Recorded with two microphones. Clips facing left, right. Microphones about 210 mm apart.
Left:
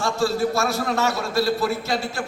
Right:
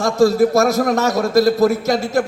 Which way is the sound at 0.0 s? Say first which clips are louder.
Right 8 dB; 40° right (ahead or behind).